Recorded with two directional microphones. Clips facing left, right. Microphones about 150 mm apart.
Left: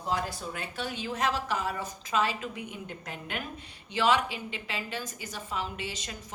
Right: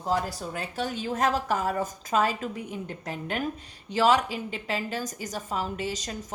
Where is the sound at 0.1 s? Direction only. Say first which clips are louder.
Right 4 dB; 40° right (ahead or behind).